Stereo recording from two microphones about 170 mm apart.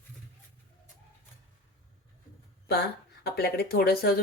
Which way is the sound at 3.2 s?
70° left (ahead or behind).